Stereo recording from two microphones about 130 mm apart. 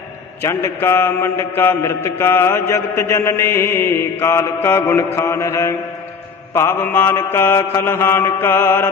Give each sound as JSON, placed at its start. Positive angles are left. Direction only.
{"t": 0.4, "sound": "mantra", "side_deg": 20}